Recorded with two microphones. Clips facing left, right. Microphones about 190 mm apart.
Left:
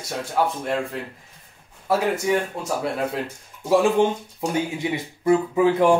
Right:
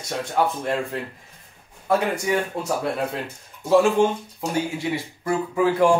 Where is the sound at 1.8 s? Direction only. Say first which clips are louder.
Left 1 dB; centre (ahead or behind).